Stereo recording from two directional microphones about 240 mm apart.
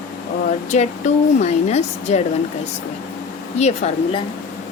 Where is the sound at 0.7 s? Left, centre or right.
Left.